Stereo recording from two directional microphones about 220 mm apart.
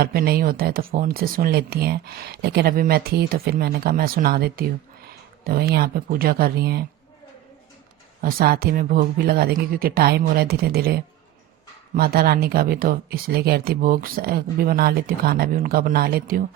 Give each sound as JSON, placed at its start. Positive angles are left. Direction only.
{"t": 0.0, "sound": "speech", "side_deg": -45}
{"t": 8.2, "sound": "speech", "side_deg": -40}